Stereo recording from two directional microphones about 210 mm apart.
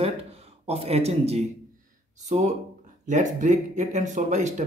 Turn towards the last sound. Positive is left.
turn(degrees=-35)  # may be behind; listen again after turning